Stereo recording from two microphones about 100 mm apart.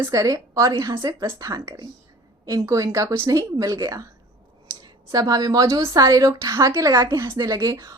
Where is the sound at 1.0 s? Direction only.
50° right (ahead or behind).